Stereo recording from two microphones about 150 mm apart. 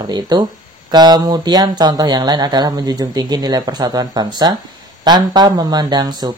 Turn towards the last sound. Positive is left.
turn(degrees=-25)  # may be behind; listen again after turning